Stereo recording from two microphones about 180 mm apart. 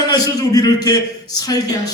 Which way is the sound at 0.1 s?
20° left (ahead or behind).